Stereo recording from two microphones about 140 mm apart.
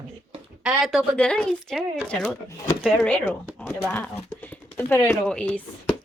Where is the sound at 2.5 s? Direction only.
25° left (ahead or behind).